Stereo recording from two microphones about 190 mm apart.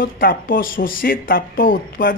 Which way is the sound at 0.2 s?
50° left (ahead or behind).